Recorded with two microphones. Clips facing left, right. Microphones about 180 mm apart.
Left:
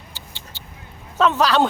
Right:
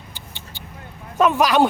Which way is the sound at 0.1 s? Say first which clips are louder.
Right 1 dB; 15° right (ahead or behind).